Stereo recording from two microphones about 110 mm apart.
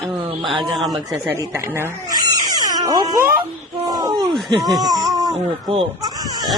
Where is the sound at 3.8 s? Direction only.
35° right (ahead or behind).